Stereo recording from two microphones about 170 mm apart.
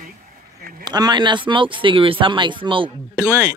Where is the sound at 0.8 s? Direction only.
25° right (ahead or behind).